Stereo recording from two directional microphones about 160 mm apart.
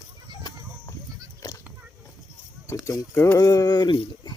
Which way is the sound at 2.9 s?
20° left (ahead or behind).